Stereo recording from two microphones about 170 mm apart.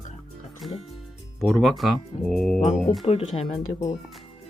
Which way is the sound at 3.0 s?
35° left (ahead or behind).